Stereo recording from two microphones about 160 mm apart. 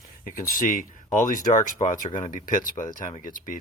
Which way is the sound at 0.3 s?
60° left (ahead or behind).